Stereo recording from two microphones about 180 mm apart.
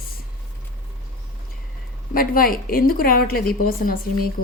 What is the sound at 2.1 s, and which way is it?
A woman's voice, 55° left (ahead or behind).